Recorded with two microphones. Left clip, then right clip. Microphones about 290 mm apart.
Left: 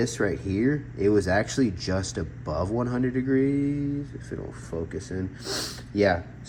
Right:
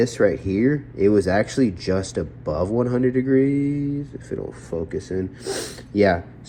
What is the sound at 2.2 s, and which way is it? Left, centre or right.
Speech, right.